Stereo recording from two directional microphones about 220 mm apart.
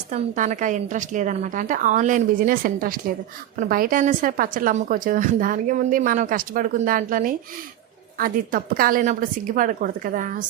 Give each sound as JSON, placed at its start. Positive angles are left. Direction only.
{"t": 0.1, "sound": "a woman's voice", "side_deg": -35}